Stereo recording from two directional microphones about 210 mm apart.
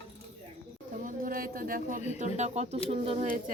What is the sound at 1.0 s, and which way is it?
Speech, 40° right (ahead or behind).